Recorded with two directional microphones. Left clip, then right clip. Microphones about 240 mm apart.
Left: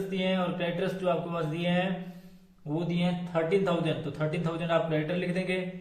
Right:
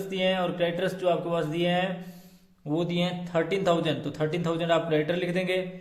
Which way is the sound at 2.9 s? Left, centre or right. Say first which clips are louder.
Right 3 dB; right.